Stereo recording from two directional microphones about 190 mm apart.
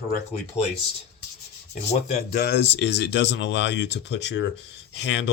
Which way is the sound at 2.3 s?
55° left (ahead or behind).